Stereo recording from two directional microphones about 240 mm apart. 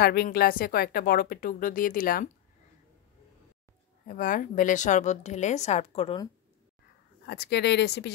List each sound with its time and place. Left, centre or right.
0.0 s speech: left
4.1 s speech: left
7.2 s speech: left